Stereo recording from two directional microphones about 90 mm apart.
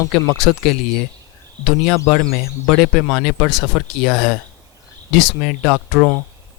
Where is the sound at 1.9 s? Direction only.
Centre (ahead or behind).